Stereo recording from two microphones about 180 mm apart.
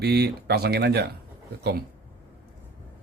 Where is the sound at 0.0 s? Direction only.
65° right (ahead or behind).